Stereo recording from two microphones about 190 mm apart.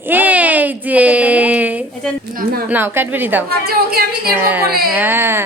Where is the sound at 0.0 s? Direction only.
10° right (ahead or behind).